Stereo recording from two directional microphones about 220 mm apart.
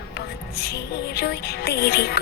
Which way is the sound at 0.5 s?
45° left (ahead or behind).